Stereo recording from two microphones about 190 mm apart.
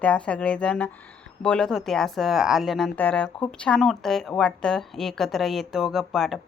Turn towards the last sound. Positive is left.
turn(degrees=0)  # may be behind; listen again after turning